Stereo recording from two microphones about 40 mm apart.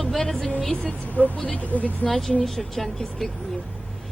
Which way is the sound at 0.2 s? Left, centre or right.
Centre.